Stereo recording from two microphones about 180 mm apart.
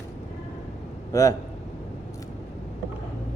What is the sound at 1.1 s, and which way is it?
Speech, 20° left (ahead or behind).